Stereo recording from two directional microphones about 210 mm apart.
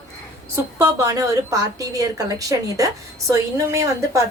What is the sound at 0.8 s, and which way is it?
A woman's voice, 15° right (ahead or behind).